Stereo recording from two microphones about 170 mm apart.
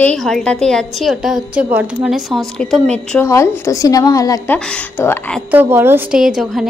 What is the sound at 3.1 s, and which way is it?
A woman's voice, 15° left (ahead or behind).